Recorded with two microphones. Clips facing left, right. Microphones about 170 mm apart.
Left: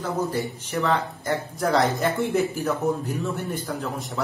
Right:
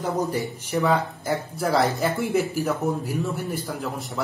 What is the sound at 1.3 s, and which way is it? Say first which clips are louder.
A man's voice: left 1 dB; centre (ahead or behind).